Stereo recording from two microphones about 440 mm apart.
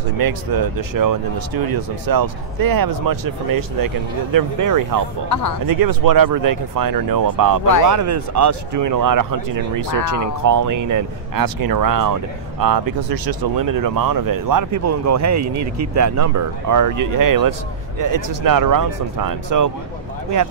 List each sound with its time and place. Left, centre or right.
0.2 s speech: right